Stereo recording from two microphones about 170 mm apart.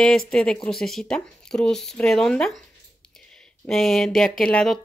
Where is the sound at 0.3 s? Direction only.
5° left (ahead or behind).